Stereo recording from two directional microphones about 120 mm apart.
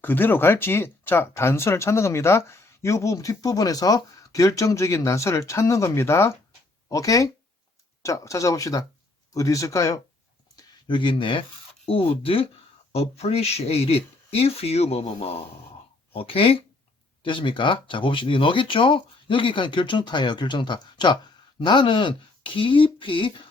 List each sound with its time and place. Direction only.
0.0 s speech: 15° left (ahead or behind)
10.5 s a sound: 35° left (ahead or behind)
11.9 s speech: 50° left (ahead or behind)